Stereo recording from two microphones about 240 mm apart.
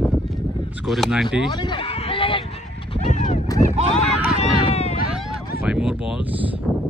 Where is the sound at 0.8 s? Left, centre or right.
Centre.